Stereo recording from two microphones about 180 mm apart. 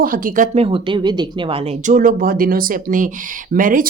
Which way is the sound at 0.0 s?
50° right (ahead or behind).